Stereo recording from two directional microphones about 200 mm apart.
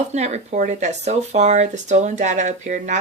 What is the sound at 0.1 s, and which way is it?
Speech, 35° right (ahead or behind).